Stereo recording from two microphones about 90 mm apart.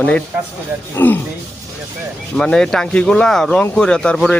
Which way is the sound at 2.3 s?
10° left (ahead or behind).